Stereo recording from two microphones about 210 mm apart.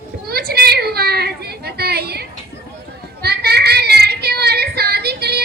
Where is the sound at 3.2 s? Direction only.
50° right (ahead or behind).